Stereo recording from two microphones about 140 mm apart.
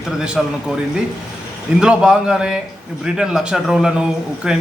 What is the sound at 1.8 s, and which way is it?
Speech, 5° right (ahead or behind).